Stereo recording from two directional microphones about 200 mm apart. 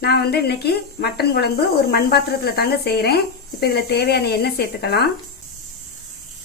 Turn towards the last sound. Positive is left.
turn(degrees=55)  # may be behind; listen again after turning